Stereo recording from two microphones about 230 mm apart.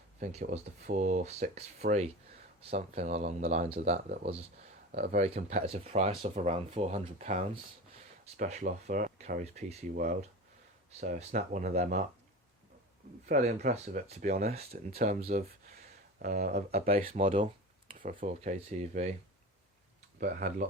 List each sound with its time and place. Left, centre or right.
0.2 s speech: right
13.2 s speech: right
20.1 s speech: right